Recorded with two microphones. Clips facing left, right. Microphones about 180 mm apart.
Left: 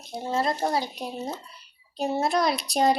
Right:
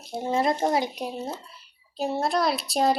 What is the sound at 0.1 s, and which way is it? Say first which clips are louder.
Speech: right 2 dB; 15° right (ahead or behind).